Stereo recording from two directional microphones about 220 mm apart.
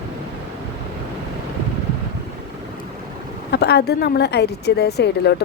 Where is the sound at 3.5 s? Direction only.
50° left (ahead or behind).